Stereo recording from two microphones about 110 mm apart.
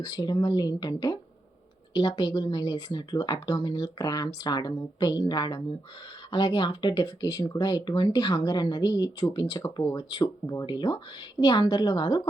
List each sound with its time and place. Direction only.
0.0 s speech: 35° left (ahead or behind)